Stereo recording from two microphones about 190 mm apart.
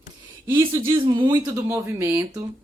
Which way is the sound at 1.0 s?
25° right (ahead or behind).